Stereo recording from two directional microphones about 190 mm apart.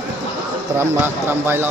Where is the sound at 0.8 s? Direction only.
10° right (ahead or behind).